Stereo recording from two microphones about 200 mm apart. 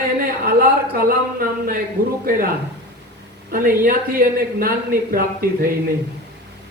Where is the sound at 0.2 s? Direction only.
45° right (ahead or behind).